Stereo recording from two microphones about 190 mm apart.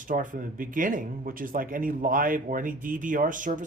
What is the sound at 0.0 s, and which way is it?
Speech, 45° right (ahead or behind).